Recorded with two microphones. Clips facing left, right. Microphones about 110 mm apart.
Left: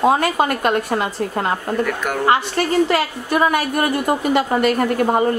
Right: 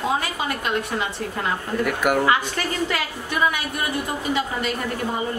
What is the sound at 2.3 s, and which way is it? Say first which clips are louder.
A woman's voice: left 5 dB; 40° left (ahead or behind).